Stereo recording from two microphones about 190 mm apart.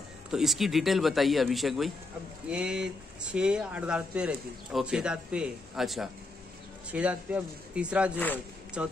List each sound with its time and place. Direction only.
0.3 s speech: centre (ahead or behind)